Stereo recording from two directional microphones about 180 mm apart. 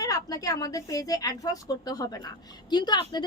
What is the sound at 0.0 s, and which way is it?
A woman's voice, 20° left (ahead or behind).